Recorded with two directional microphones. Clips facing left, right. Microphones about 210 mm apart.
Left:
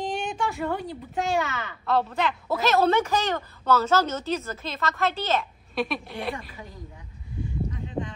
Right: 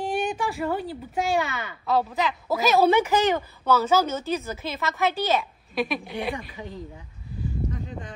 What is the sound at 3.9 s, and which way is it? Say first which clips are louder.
A woman's voice: right 1 dB; 10° right (ahead or behind).